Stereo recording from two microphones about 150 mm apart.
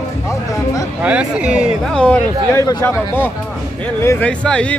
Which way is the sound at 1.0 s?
10° right (ahead or behind).